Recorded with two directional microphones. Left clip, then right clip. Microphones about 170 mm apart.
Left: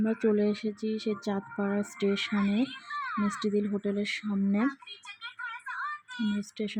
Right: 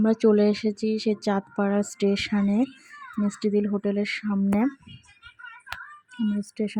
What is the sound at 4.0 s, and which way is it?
Speech, 25° right (ahead or behind).